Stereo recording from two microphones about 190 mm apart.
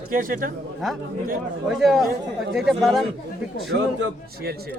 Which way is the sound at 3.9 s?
55° right (ahead or behind).